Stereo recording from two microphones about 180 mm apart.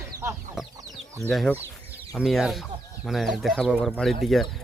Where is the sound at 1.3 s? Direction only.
Centre (ahead or behind).